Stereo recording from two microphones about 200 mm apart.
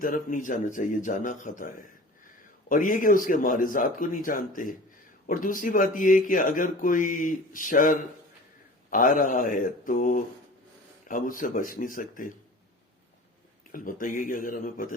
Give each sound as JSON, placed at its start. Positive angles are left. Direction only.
{"t": 0.0, "sound": "speech", "side_deg": 45}
{"t": 13.7, "sound": "speech", "side_deg": 45}